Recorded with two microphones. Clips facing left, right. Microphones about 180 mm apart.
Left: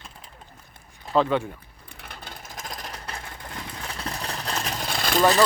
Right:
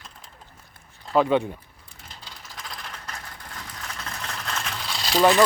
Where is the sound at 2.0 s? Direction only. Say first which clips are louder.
Left 4 dB; 55° left (ahead or behind).